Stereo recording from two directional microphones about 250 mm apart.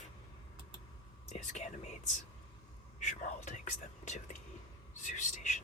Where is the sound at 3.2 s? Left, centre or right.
Left.